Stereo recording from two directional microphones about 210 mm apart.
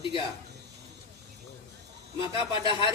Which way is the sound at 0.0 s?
25° left (ahead or behind).